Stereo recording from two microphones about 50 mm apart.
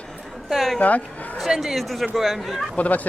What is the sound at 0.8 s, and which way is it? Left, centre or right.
Speech, left.